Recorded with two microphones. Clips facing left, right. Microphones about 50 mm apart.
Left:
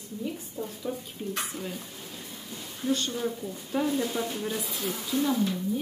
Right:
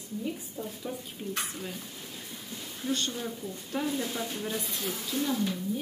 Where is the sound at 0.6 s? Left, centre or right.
Centre.